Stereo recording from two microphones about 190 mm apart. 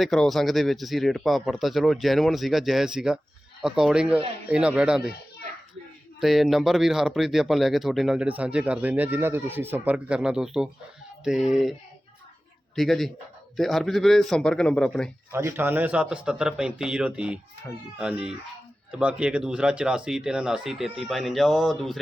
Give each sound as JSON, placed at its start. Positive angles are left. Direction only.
{"t": 0.0, "sound": "speech", "side_deg": 0}
{"t": 6.1, "sound": "speech", "side_deg": 0}
{"t": 12.7, "sound": "speech", "side_deg": 0}
{"t": 15.3, "sound": "speech", "side_deg": -15}